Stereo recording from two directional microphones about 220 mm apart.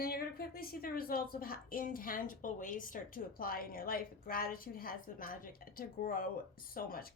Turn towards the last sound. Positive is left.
turn(degrees=40)  # may be behind; listen again after turning